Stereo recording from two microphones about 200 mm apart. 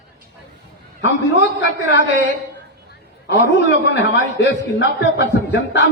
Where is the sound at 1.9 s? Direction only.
65° left (ahead or behind).